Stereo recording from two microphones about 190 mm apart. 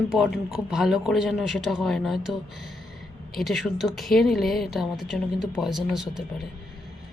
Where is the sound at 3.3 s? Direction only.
Centre (ahead or behind).